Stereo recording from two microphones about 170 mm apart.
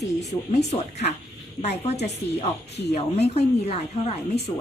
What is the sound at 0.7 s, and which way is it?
Speech, 40° left (ahead or behind).